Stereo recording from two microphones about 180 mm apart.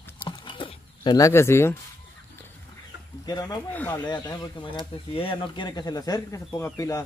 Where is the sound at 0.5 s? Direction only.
25° left (ahead or behind).